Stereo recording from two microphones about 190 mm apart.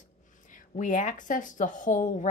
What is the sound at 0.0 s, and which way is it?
Speech, 40° left (ahead or behind).